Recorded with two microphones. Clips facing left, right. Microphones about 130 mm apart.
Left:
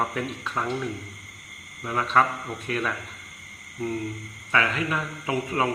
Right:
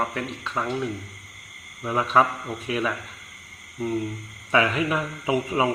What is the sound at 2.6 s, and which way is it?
Speech, 5° right (ahead or behind).